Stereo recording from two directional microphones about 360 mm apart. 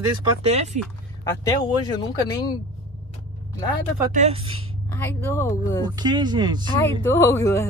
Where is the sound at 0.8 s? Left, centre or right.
Centre.